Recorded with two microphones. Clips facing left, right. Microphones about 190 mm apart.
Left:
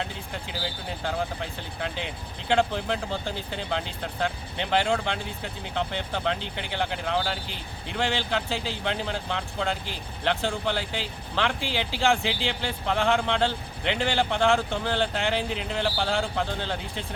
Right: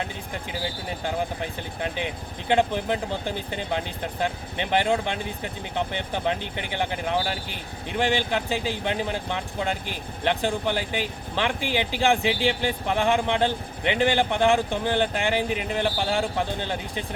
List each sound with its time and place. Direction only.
1.0 s speech: 15° right (ahead or behind)